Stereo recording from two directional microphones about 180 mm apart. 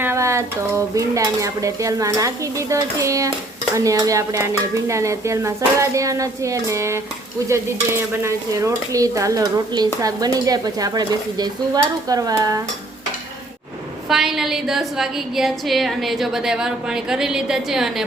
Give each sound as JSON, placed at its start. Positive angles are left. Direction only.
{"t": 0.0, "sound": "dishes", "side_deg": -15}
{"t": 7.4, "sound": "stir", "side_deg": -15}
{"t": 14.1, "sound": "a woman's voice", "side_deg": 0}